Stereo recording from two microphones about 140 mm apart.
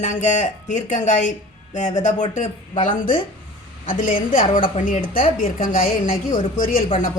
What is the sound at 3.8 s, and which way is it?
Speech, 75° left (ahead or behind).